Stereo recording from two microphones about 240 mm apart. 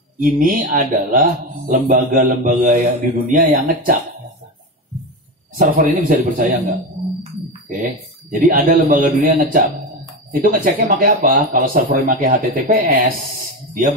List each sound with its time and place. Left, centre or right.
0.2 s a man's voice: right
5.6 s a man's voice: right
7.8 s a man's voice: right